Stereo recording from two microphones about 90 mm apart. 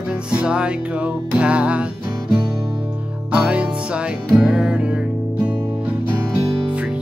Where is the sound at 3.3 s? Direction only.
10° right (ahead or behind).